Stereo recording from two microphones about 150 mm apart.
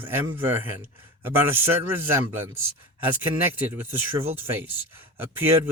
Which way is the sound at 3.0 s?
10° right (ahead or behind).